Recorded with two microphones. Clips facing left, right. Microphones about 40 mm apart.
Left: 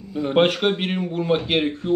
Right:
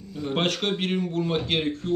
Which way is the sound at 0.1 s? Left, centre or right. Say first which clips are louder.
Left 8 dB; left.